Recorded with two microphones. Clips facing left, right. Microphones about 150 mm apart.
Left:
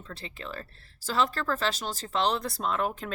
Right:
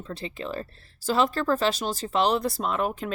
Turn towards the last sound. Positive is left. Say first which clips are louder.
# right 3 dB
turn(degrees=-5)  # may be behind; listen again after turning